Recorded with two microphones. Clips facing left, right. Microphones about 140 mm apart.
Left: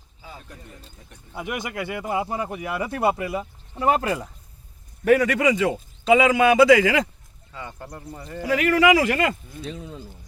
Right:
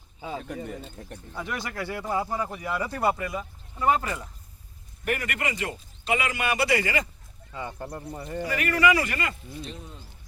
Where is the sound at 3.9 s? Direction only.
90° left.